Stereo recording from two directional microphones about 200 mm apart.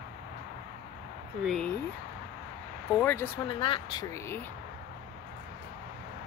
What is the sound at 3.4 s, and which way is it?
Speech, 25° left (ahead or behind).